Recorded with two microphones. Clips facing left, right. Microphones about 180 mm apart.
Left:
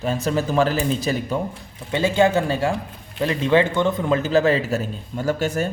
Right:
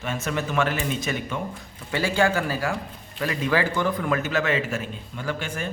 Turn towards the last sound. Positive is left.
turn(degrees=40)  # may be behind; listen again after turning